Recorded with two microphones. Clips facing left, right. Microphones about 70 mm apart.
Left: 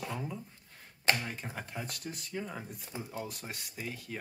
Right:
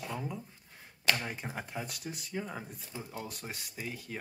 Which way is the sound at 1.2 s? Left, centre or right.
Centre.